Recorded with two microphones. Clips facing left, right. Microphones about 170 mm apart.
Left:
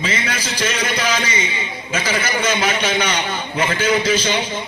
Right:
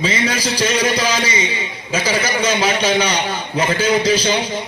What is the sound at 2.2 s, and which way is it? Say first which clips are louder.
A man's voice: right 2 dB; 35° right (ahead or behind).